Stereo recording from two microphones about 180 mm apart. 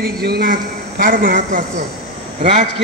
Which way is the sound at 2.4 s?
40° right (ahead or behind).